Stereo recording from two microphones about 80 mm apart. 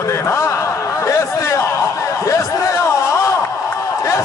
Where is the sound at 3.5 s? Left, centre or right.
Left.